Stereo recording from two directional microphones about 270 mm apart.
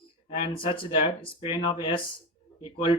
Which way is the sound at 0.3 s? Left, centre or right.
Centre.